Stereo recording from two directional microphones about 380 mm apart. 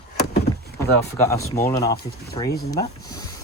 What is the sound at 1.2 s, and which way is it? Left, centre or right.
Speech, centre.